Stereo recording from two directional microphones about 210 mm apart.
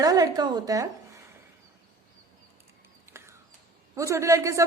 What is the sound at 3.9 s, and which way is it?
Speech, 15° right (ahead or behind).